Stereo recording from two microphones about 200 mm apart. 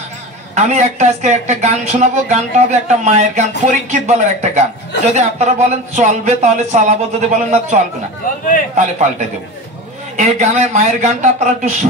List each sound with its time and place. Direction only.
0.6 s speech: 35° right (ahead or behind)
10.1 s speech: 35° right (ahead or behind)